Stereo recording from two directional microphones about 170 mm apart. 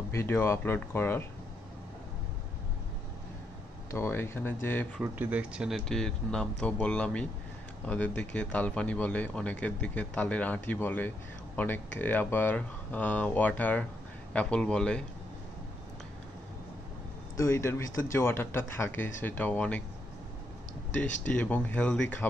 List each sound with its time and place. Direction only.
0.1 s speech: 15° left (ahead or behind)
3.9 s speech: 15° left (ahead or behind)
5.0 s speech: 10° right (ahead or behind); by 15.0 s 5° left (ahead or behind)
17.4 s speech: 15° left (ahead or behind)
21.2 s speech: 10° left (ahead or behind)